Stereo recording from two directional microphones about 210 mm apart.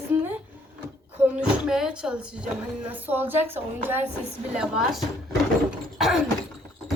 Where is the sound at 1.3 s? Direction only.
5° right (ahead or behind).